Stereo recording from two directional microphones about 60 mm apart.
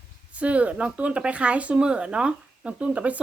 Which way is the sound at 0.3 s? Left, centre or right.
Right.